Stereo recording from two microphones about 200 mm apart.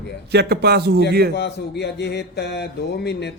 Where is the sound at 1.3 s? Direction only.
55° left (ahead or behind).